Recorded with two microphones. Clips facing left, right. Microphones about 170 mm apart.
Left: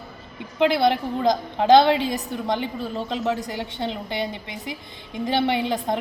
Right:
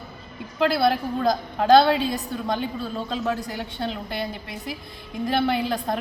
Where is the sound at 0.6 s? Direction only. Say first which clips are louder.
Left 1 dB; 20° left (ahead or behind).